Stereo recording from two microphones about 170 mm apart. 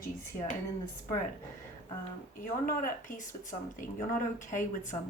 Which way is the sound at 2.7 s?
55° left (ahead or behind).